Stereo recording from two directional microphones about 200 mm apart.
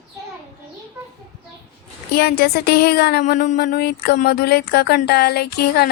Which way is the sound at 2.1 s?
50° left (ahead or behind).